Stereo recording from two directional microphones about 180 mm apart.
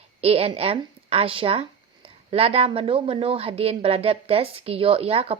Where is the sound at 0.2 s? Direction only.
35° right (ahead or behind).